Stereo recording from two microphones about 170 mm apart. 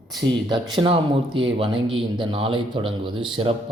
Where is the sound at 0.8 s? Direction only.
30° right (ahead or behind).